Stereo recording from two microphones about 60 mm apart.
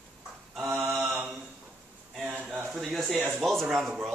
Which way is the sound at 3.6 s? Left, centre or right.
Centre.